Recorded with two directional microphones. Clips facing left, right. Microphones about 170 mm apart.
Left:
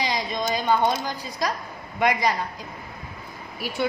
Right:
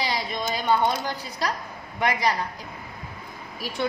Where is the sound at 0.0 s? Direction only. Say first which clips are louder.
Left 2 dB; 15° left (ahead or behind).